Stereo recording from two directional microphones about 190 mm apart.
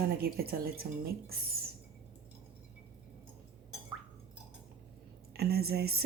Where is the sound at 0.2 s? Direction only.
55° right (ahead or behind).